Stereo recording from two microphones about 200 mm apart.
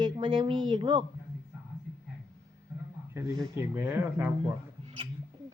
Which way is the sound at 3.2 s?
15° right (ahead or behind).